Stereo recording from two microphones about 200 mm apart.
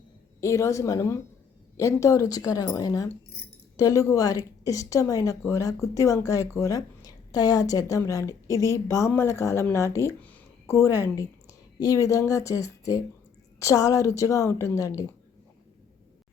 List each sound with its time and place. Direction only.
0.4 s a woman's voice: 15° left (ahead or behind)